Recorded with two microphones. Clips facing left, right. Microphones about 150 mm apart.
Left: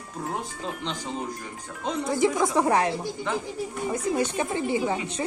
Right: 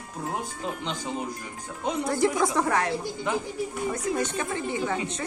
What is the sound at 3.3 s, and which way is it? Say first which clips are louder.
Speech: right 1 dB; 15° right (ahead or behind).